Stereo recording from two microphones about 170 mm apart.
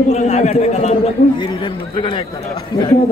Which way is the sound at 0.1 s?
40° left (ahead or behind).